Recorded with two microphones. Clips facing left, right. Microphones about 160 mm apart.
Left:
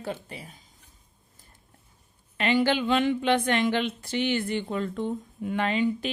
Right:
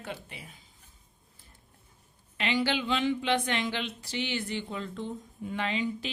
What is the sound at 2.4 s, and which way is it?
Speech, 50° left (ahead or behind).